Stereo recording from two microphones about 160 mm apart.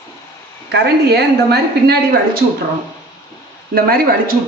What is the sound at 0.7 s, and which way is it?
A woman's voice, 90° right.